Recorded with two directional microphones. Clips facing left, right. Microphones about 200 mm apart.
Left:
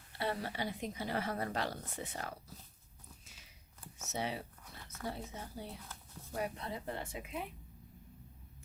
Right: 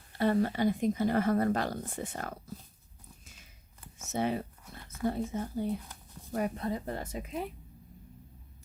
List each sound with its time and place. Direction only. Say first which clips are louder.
0.2 s speech: right 11 dB; 45° right (ahead or behind)
4.1 s speech: right 8 dB; 50° right (ahead or behind)
5.9 s a sound: right 1 dB; 15° right (ahead or behind)
6.3 s speech: right 7 dB; 45° right (ahead or behind)